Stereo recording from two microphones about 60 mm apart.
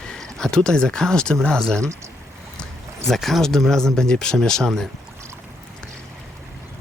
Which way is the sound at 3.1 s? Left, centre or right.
Centre.